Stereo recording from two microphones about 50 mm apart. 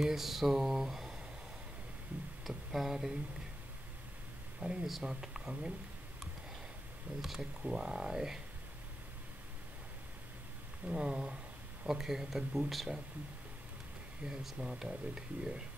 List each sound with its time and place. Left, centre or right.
0.0 s a sound: centre
2.4 s speech: centre
4.6 s speech: right
5.0 s speech: centre
7.2 s speech: centre
7.6 s a sound: centre
10.9 s speech: centre
12.0 s speech: centre
14.2 s a sound: centre